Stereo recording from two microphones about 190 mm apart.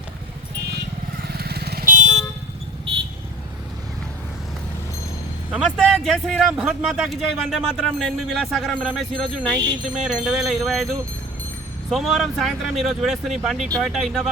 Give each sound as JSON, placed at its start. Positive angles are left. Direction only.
{"t": 1.4, "sound": "vehicle", "side_deg": -55}
{"t": 5.5, "sound": "speech", "side_deg": 0}
{"t": 11.9, "sound": "speech", "side_deg": 0}